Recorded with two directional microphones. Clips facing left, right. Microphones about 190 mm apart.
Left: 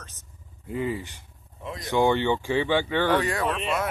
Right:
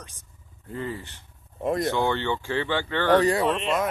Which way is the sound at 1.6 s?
50° right (ahead or behind).